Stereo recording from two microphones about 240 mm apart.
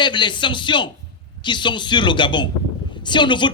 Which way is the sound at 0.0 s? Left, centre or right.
Centre.